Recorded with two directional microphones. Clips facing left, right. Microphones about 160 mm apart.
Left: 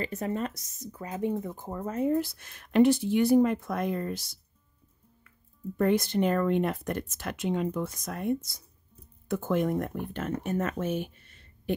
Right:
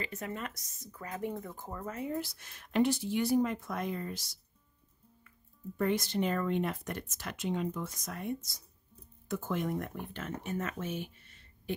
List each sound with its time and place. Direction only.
0.0 s speech: 35° left (ahead or behind); by 4.4 s 55° left (ahead or behind)
5.8 s speech: 55° left (ahead or behind)